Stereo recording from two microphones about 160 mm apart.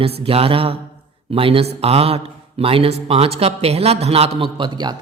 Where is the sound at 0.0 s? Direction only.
35° right (ahead or behind).